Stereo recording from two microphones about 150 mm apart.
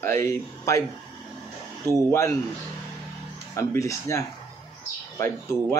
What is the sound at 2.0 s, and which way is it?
Speech, 15° left (ahead or behind).